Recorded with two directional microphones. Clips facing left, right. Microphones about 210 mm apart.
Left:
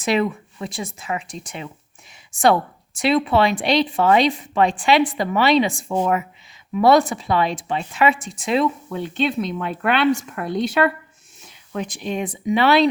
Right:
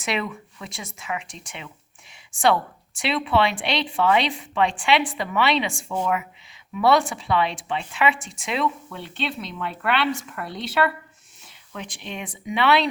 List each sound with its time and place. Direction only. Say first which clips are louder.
0.0 s speech: left 7 dB; 35° left (ahead or behind)